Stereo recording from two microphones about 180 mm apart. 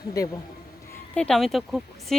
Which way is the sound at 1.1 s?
5° left (ahead or behind).